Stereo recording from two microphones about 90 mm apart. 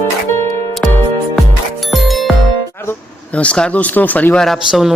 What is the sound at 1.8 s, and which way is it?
Music, centre (ahead or behind).